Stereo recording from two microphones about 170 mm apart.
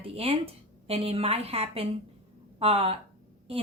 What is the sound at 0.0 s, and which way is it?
A woman's voice, 35° right (ahead or behind).